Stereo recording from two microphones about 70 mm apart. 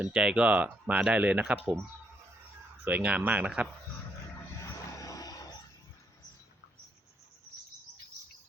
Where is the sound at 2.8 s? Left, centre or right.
Right.